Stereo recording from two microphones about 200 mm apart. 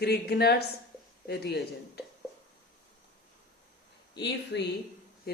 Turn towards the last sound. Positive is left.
turn(degrees=50)  # may be behind; listen again after turning